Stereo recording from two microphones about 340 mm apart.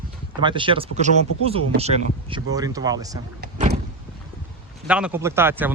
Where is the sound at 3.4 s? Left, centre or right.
Right.